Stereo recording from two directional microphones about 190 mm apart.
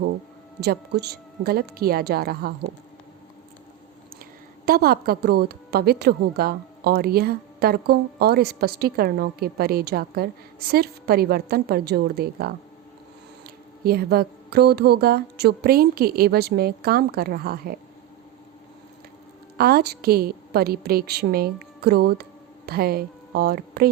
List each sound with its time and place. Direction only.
0.6 s a woman's voice: 60° right (ahead or behind)
4.2 s a woman's voice: 50° right (ahead or behind)
19.5 s a woman's voice: 55° right (ahead or behind)